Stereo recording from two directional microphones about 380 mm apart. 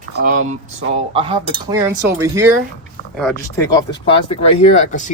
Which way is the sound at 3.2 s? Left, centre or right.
Centre.